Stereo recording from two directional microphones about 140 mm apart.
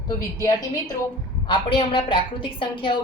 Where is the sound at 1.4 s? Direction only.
35° left (ahead or behind).